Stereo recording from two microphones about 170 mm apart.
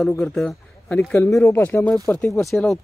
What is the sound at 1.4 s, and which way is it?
Speech, 15° left (ahead or behind).